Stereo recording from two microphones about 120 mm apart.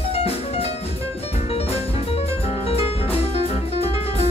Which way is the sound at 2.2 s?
55° left (ahead or behind).